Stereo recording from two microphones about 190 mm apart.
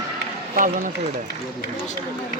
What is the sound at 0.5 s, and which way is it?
Speech, 45° right (ahead or behind).